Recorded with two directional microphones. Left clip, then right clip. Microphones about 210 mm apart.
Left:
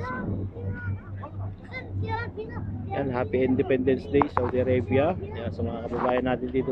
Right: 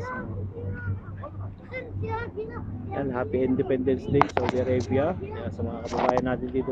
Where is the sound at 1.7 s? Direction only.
45° left (ahead or behind).